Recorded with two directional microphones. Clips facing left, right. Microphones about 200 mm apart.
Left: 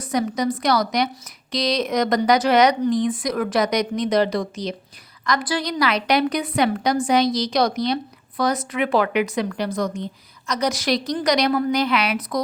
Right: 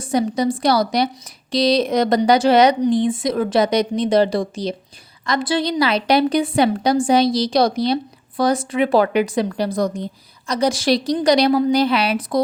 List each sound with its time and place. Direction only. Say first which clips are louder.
0.0 s a woman's voice: right 3 dB; 30° right (ahead or behind)